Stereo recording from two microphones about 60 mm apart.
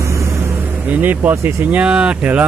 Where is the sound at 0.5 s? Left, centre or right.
Right.